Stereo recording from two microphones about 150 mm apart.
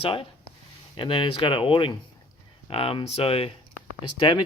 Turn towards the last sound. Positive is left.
turn(degrees=30)  # may be behind; listen again after turning